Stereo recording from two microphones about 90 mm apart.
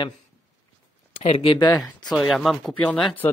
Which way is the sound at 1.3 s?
90° left.